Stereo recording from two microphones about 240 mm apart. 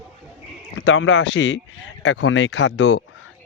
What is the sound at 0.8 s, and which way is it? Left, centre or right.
Speech, left.